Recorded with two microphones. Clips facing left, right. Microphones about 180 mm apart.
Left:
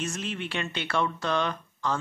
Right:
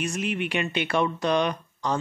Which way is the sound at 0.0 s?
15° right (ahead or behind).